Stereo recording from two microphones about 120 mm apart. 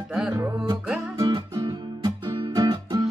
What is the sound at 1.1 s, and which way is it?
Music, 35° right (ahead or behind).